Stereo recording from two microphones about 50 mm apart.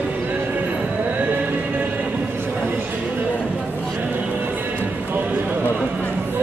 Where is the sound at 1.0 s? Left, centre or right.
Right.